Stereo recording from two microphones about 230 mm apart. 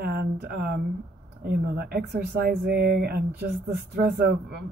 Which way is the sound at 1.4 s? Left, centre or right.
Right.